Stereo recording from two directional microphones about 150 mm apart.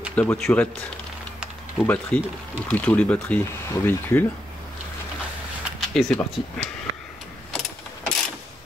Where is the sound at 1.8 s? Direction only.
10° left (ahead or behind).